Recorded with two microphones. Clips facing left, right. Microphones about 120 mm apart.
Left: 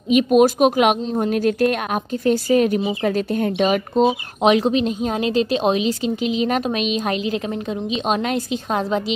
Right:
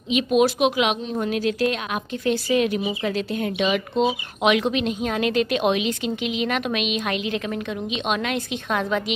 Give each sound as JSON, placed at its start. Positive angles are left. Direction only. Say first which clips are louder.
{"t": 0.1, "sound": "speech", "louder": "left 5 dB", "side_deg": 45}